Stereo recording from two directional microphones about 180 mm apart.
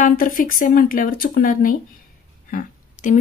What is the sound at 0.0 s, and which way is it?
Speech, 50° left (ahead or behind).